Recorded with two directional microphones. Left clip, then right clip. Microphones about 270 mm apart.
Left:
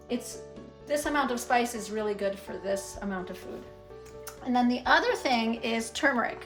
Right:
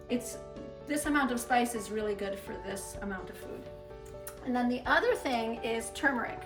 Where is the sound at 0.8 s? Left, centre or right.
Centre.